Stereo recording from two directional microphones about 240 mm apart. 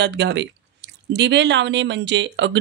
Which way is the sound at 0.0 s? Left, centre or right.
Right.